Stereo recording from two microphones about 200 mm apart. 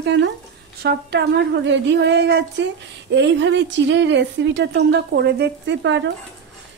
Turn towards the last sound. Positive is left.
turn(degrees=-65)  # may be behind; listen again after turning